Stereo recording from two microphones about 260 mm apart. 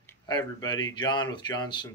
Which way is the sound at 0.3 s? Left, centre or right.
Centre.